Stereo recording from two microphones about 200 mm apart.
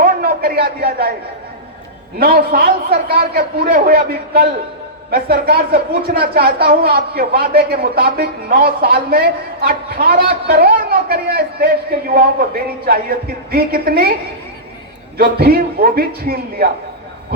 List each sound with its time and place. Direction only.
0.0 s a sound: 45° right (ahead or behind)
2.1 s a woman's voice: 45° right (ahead or behind)
5.1 s a woman's voice: 50° right (ahead or behind)
15.2 s a woman's voice: 50° right (ahead or behind)